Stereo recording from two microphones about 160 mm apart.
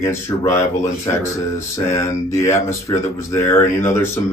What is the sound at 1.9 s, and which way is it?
Speech, 20° left (ahead or behind).